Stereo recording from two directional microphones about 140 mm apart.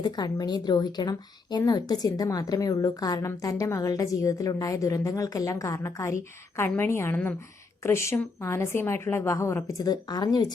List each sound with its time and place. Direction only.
0.0 s speech: 30° left (ahead or behind)